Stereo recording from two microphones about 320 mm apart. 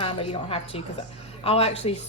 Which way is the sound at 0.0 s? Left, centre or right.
Centre.